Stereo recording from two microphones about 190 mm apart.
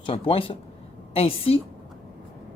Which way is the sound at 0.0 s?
30° left (ahead or behind).